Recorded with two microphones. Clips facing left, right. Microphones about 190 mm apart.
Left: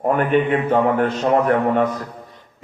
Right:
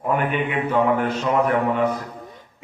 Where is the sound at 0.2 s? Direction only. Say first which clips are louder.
Left 6 dB; 45° left (ahead or behind).